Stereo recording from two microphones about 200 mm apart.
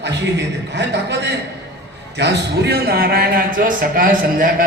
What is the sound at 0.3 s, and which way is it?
A man's voice, 60° right (ahead or behind).